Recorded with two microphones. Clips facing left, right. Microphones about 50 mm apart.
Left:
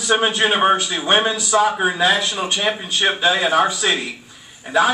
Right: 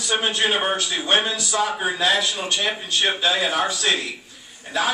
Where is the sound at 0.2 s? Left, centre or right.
Centre.